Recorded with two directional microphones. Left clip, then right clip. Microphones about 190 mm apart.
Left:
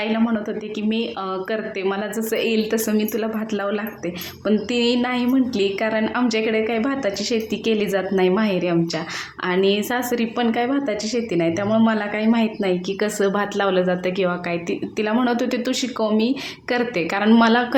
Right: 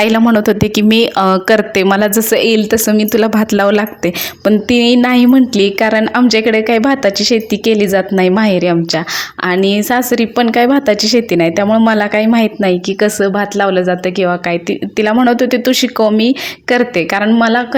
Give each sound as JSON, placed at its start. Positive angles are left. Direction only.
{"t": 0.0, "sound": "a woman's voice", "side_deg": -55}
{"t": 17.2, "sound": "a woman's voice", "side_deg": -20}